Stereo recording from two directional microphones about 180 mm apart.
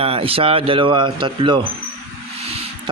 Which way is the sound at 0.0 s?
30° right (ahead or behind).